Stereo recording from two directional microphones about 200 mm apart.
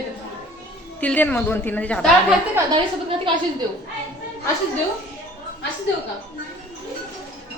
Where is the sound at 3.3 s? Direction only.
25° right (ahead or behind).